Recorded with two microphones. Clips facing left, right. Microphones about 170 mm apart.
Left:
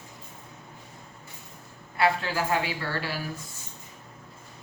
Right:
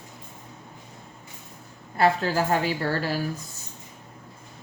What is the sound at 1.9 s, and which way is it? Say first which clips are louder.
A woman's voice: right 4 dB; 40° right (ahead or behind).